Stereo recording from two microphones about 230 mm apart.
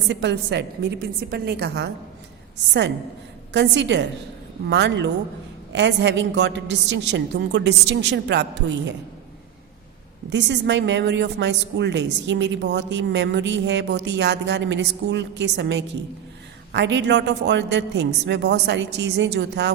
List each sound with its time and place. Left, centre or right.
0.1 s a woman's voice: right
3.5 s a woman's voice: right
10.2 s a woman's voice: right